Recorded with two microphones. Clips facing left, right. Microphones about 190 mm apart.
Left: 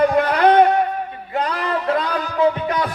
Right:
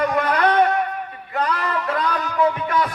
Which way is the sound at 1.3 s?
25° left (ahead or behind).